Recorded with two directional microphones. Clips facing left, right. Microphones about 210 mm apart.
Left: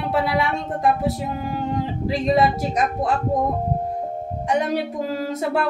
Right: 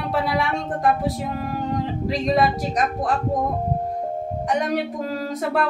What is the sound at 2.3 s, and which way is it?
Speech, 25° left (ahead or behind).